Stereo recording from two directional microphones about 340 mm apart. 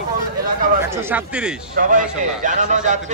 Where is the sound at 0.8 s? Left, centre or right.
Centre.